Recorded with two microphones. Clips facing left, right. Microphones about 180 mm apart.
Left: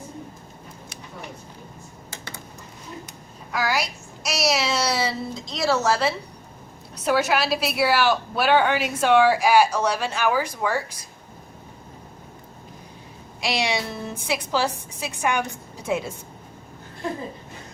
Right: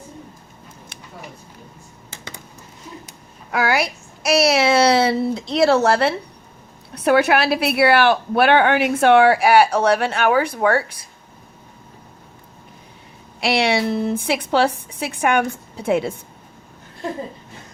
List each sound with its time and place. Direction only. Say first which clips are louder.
3.5 s a woman's voice: right 5 dB; 60° right (ahead or behind)
13.4 s a woman's voice: right 7 dB; 60° right (ahead or behind)